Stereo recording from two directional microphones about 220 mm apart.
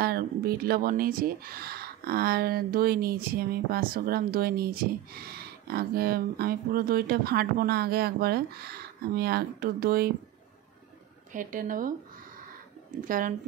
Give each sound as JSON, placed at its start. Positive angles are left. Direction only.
{"t": 0.0, "sound": "speech", "side_deg": -45}
{"t": 11.3, "sound": "speech", "side_deg": -35}
{"t": 13.0, "sound": "speech", "side_deg": -40}